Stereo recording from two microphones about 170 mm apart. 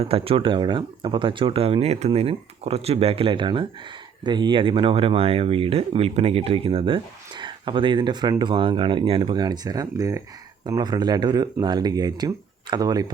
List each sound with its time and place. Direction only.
0.0 s speech: 35° right (ahead or behind)